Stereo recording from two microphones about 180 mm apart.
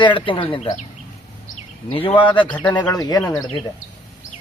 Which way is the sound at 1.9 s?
30° left (ahead or behind).